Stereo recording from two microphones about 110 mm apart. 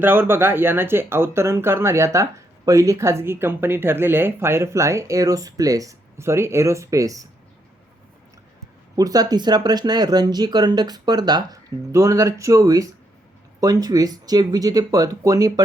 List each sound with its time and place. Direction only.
0.0 s speech: 20° right (ahead or behind)
9.0 s speech: 35° right (ahead or behind)